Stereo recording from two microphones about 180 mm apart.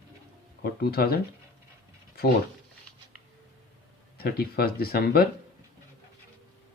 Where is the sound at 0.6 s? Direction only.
60° left (ahead or behind).